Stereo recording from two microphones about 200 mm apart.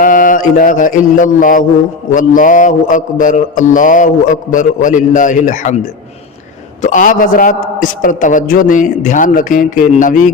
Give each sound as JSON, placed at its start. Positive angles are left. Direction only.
{"t": 0.0, "sound": "mantra", "side_deg": 45}
{"t": 6.8, "sound": "mantra", "side_deg": 40}